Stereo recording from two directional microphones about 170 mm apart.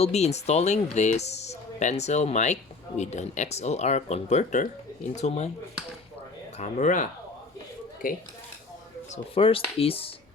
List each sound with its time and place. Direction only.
0.0 s speech: 40° left (ahead or behind)
6.6 s speech: 45° left (ahead or behind)
9.1 s speech: 35° left (ahead or behind)